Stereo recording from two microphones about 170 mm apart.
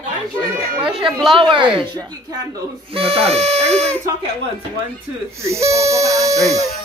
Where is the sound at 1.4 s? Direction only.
30° right (ahead or behind).